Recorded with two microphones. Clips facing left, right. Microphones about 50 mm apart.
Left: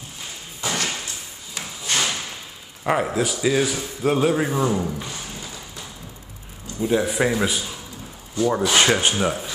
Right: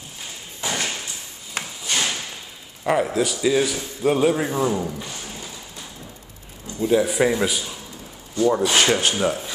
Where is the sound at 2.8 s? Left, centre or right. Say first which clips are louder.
Right 1 dB; centre.